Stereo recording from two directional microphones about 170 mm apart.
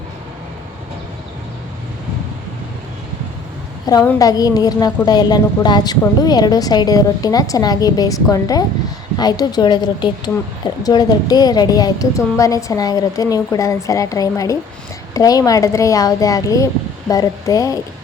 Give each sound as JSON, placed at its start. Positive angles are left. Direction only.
{"t": 3.9, "sound": "a woman's voice", "side_deg": 20}